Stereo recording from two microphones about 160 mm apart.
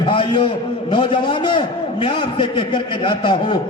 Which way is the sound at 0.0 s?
30° left (ahead or behind).